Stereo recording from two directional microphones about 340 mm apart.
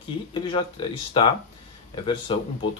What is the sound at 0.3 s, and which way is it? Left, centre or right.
Speech, centre.